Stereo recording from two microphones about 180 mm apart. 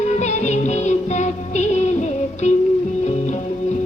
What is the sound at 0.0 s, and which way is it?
Music, 40° left (ahead or behind).